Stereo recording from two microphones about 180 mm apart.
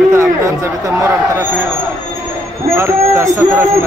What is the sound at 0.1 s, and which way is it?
Speech, 15° right (ahead or behind).